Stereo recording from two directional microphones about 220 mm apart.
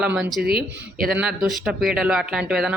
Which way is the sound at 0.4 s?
45° right (ahead or behind).